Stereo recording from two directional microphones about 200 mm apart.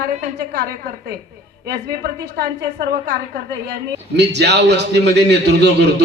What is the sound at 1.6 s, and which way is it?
A man's voice, 55° right (ahead or behind).